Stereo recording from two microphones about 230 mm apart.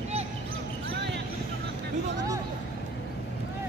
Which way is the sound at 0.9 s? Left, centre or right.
Right.